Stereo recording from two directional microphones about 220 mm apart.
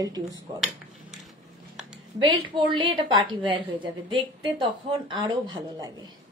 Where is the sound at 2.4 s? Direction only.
20° right (ahead or behind).